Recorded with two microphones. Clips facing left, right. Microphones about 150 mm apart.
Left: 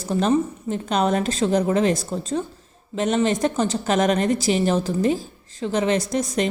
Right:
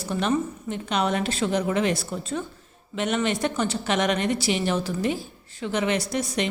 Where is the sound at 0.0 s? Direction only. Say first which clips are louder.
Left 5 dB; 35° left (ahead or behind).